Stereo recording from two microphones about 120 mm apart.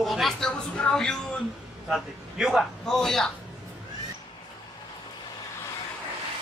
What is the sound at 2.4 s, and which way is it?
Speech, centre (ahead or behind).